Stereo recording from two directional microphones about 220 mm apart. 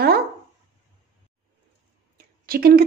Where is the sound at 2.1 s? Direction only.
40° right (ahead or behind).